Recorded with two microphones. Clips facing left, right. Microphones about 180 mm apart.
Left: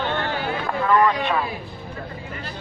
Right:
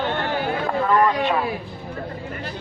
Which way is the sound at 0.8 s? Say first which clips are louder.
Left 1 dB; 15° right (ahead or behind).